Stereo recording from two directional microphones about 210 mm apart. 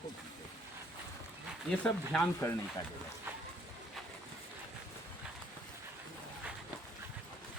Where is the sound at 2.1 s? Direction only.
10° left (ahead or behind).